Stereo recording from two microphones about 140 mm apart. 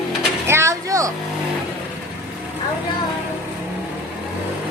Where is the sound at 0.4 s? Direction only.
20° right (ahead or behind).